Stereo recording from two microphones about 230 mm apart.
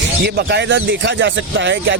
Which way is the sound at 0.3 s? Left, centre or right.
Right.